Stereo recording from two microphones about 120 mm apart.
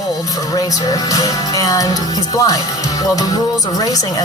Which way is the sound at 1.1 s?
30° left (ahead or behind).